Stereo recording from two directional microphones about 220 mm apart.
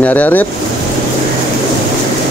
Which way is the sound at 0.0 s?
5° left (ahead or behind).